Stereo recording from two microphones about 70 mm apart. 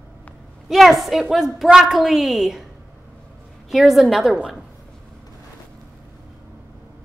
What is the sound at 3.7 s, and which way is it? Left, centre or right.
Speech, centre.